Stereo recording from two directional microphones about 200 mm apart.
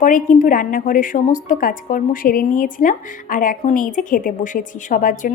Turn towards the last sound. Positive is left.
turn(degrees=40)  # may be behind; listen again after turning